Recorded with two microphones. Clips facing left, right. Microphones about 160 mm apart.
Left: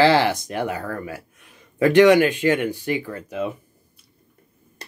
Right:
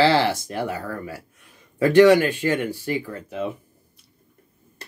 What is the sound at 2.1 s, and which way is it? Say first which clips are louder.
Speech: left 1 dB; 15° left (ahead or behind).